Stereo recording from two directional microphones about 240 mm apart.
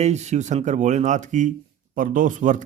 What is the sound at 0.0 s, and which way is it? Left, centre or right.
A man's voice, right.